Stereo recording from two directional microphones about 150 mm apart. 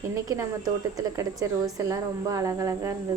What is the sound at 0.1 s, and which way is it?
A woman's voice, 20° right (ahead or behind).